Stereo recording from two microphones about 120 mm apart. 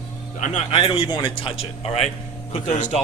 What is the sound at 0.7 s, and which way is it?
Speech, 50° left (ahead or behind).